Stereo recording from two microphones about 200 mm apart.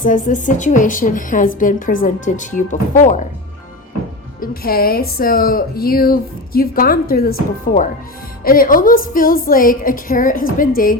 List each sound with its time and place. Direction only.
0.0 s a woman's voice: 40° left (ahead or behind)
4.4 s speech: 45° left (ahead or behind)